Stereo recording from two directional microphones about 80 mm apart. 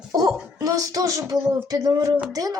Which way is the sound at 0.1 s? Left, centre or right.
Right.